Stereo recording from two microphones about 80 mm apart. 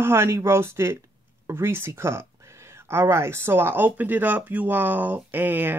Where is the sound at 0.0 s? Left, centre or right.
Right.